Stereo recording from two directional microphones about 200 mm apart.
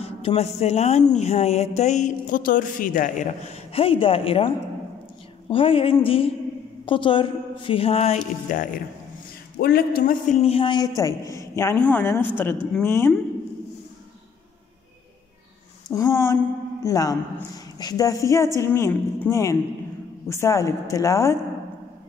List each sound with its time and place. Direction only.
0.0 s a woman's voice: 30° left (ahead or behind)
9.6 s speech: 50° left (ahead or behind); by 10.9 s 25° left (ahead or behind)
11.3 s a woman's voice: 15° left (ahead or behind)
15.9 s a woman's voice: 15° left (ahead or behind)